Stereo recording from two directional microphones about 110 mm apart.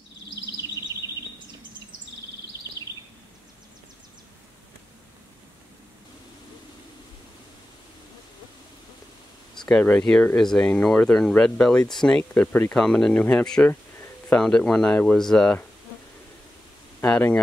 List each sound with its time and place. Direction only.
0.6 s bird vocalization: 35° right (ahead or behind)
9.7 s speech: 10° left (ahead or behind)
17.0 s speech: 15° left (ahead or behind)